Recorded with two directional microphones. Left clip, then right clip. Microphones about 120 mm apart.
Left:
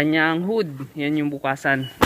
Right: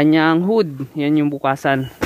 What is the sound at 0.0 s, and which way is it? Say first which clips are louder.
Speech: right 5 dB; 40° right (ahead or behind).